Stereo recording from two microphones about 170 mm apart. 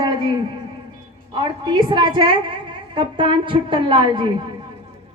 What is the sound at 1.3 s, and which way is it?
A woman's voice, 25° right (ahead or behind).